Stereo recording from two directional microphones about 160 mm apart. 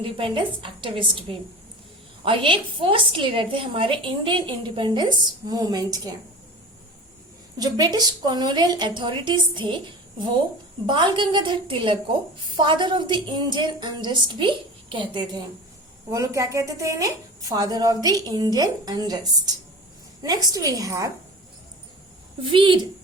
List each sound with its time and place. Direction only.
0.0 s a woman's voice: 35° right (ahead or behind)
7.6 s a woman's voice: 25° right (ahead or behind)
10.8 s a woman's voice: 30° right (ahead or behind)
16.0 s a woman's voice: 20° right (ahead or behind)
20.2 s a woman's voice: 25° right (ahead or behind)
22.4 s a woman's voice: 30° right (ahead or behind)